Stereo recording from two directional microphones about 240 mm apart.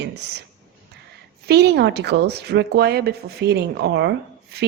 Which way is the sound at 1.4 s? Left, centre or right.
Right.